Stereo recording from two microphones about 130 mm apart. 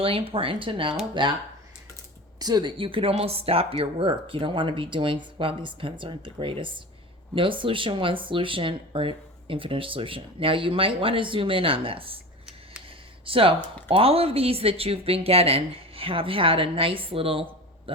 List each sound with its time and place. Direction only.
0.0 s speech: 45° right (ahead or behind)
2.4 s speech: 30° right (ahead or behind)
13.2 s speech: 45° right (ahead or behind)